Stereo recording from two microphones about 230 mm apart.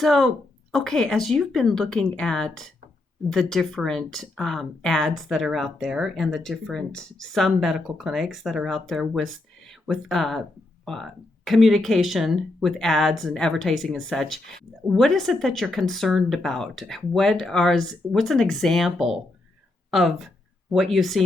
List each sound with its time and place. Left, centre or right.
0.0 s speech: centre